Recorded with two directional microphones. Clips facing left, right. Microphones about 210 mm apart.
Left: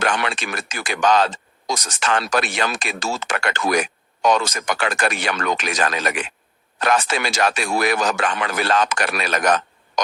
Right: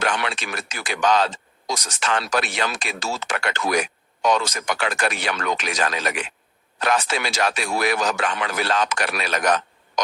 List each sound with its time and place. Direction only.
0.0 s speech: 50° left (ahead or behind)